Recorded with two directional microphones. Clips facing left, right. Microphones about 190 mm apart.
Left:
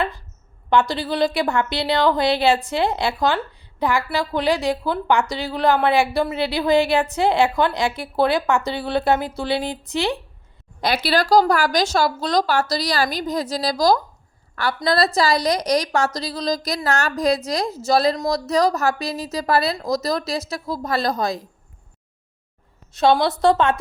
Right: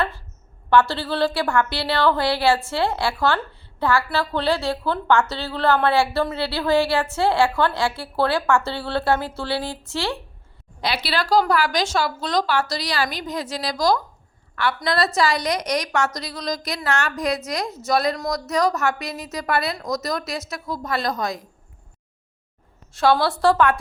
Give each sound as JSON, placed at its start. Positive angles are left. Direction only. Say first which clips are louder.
{"t": 0.7, "sound": "a woman's voice", "louder": "right 1 dB", "side_deg": 15}
{"t": 10.8, "sound": "a woman's voice", "louder": "left 5 dB", "side_deg": 45}
{"t": 22.9, "sound": "a woman's voice", "louder": "left 2 dB", "side_deg": 20}